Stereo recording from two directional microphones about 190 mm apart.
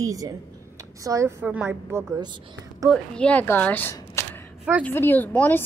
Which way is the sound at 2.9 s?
5° left (ahead or behind).